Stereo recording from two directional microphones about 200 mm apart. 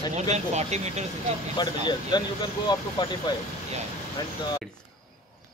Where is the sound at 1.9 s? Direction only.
20° left (ahead or behind).